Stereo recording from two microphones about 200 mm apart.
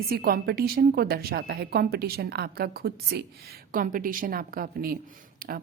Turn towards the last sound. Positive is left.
turn(degrees=-45)  # may be behind; listen again after turning